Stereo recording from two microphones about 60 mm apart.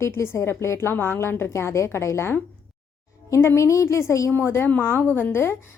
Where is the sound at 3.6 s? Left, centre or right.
Left.